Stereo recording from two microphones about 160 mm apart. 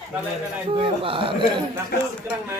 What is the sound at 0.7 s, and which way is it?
Speech, 35° right (ahead or behind).